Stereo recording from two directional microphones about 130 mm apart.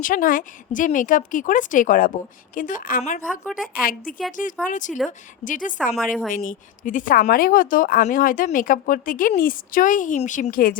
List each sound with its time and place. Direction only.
0.0 s speech: 90° left
3.4 s a woman's voice: 5° right (ahead or behind)
3.8 s speech: 90° left; by 4.9 s 75° left (ahead or behind)
5.5 s speech: 90° left
10.2 s speech: 70° left (ahead or behind); by 10.8 s 90° left